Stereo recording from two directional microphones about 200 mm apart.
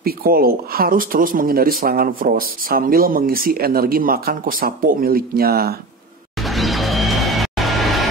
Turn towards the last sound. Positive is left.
turn(degrees=0)  # may be behind; listen again after turning